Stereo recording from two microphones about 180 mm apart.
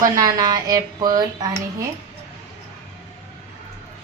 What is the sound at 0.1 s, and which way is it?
Speech, 20° right (ahead or behind).